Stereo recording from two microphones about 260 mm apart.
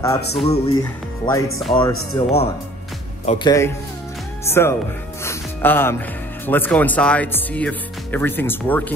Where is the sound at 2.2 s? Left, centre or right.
Left.